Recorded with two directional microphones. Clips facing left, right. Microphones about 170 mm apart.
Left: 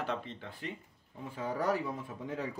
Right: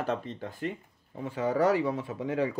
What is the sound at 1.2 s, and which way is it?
Speech, 80° right.